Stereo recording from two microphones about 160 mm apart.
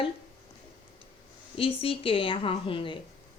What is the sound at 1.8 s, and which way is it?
A woman's voice, 35° left (ahead or behind).